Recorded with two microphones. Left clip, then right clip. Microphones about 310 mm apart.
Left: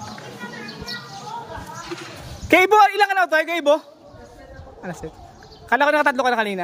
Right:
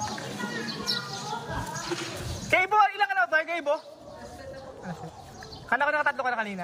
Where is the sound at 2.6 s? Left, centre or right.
Centre.